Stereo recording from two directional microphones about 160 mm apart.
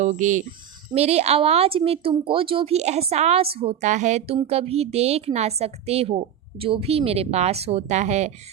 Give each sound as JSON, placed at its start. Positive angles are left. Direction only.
{"t": 0.0, "sound": "a woman's voice", "side_deg": -50}